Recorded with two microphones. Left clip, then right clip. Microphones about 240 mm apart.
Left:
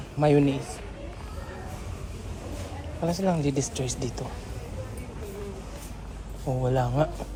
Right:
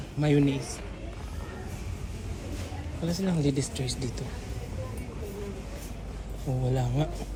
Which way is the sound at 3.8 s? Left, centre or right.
Left.